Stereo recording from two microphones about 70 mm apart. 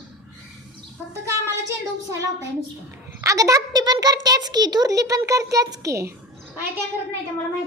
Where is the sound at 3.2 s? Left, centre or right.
Right.